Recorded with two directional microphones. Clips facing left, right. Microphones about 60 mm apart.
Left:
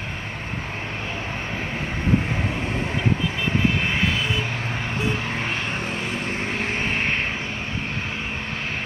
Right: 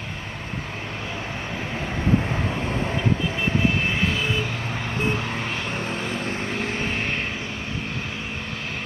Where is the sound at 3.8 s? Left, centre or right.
Left.